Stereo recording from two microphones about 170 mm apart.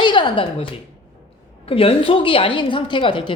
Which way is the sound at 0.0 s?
25° left (ahead or behind).